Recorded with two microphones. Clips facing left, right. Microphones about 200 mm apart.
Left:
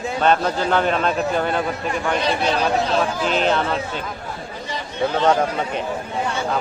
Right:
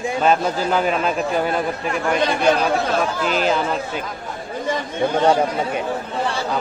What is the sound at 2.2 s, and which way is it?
Speech, 50° right (ahead or behind).